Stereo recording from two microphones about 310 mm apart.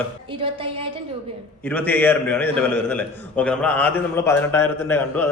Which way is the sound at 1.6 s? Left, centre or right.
Centre.